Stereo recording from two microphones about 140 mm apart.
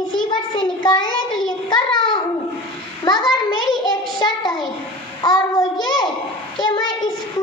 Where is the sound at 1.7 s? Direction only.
30° left (ahead or behind).